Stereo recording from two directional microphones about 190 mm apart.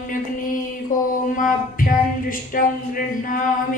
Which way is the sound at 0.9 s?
45° left (ahead or behind).